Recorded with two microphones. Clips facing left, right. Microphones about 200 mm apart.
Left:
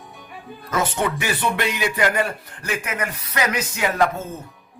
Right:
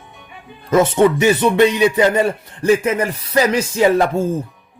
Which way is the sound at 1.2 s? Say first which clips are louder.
Right 11 dB; 20° right (ahead or behind).